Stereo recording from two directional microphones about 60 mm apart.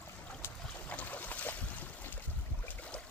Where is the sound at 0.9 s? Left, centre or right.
Left.